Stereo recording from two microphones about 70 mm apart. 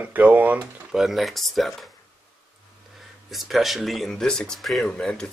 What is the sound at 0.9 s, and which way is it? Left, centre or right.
Speech, centre.